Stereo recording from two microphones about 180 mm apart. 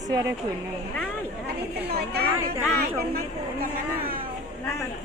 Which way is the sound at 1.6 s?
65° right (ahead or behind).